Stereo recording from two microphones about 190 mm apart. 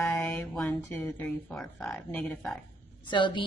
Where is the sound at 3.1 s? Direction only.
25° left (ahead or behind).